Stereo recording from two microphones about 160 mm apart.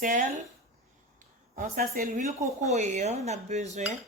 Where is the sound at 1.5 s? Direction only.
55° right (ahead or behind).